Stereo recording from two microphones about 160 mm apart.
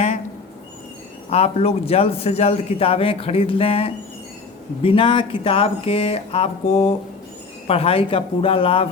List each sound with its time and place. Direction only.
1.3 s a man's voice: 40° left (ahead or behind)